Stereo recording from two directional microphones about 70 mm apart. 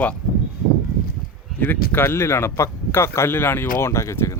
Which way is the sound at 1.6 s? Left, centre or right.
Left.